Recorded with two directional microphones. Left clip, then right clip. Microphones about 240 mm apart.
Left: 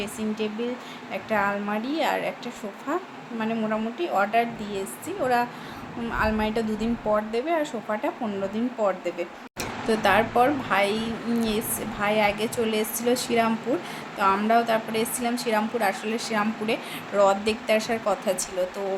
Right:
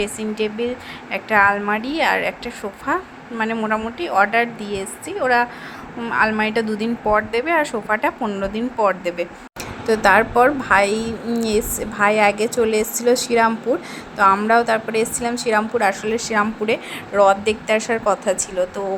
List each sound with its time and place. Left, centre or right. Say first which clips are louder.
0.0 s a woman's voice: right 7 dB; centre